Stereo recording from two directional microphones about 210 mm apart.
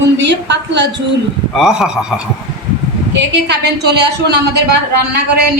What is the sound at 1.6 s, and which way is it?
Speech, centre (ahead or behind).